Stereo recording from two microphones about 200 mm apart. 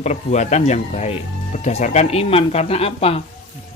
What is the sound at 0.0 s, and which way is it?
Speech, 35° left (ahead or behind).